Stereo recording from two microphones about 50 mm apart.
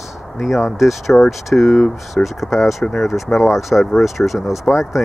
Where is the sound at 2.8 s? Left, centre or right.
Centre.